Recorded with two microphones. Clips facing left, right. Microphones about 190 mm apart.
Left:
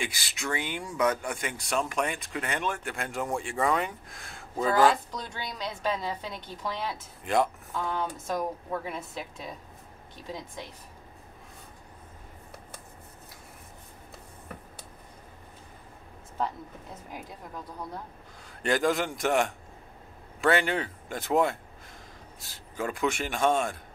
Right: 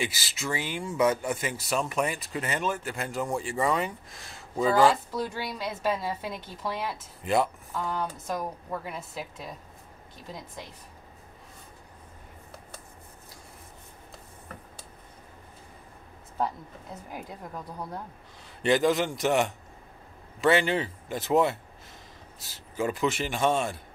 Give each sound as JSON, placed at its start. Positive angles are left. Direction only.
{"t": 0.0, "sound": "speech", "side_deg": -5}
{"t": 18.6, "sound": "speech", "side_deg": 0}